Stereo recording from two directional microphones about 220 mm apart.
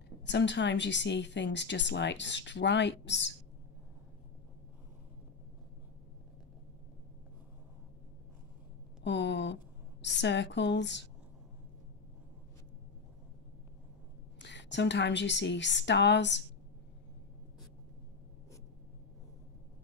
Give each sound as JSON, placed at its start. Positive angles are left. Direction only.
{"t": 0.2, "sound": "speech", "side_deg": 55}
{"t": 9.0, "sound": "speech", "side_deg": 50}
{"t": 14.4, "sound": "speech", "side_deg": 55}